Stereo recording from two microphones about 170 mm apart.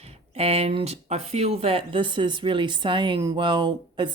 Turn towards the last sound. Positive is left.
turn(degrees=-25)  # may be behind; listen again after turning